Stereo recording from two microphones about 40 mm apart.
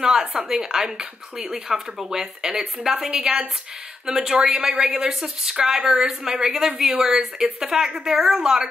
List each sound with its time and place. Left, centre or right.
0.2 s a woman's voice: right